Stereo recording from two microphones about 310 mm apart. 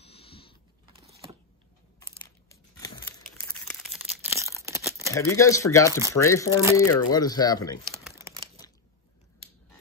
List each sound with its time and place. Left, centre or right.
0.0 s a sound: centre
2.0 s crumpling: centre
5.1 s speech: centre
8.0 s crumpling: centre